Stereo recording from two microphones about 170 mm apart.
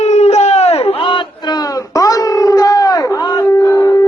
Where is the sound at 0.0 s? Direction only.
40° left (ahead or behind).